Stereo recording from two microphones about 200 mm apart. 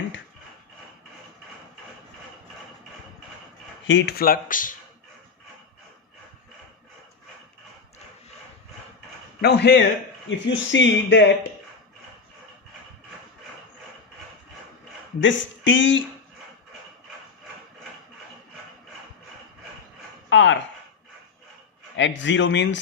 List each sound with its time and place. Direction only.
3.8 s speech: 60° left (ahead or behind); by 4.7 s 45° left (ahead or behind)
9.4 s speech: 55° left (ahead or behind)
15.2 s speech: 65° left (ahead or behind)
20.3 s speech: 65° left (ahead or behind)
21.9 s speech: 65° left (ahead or behind)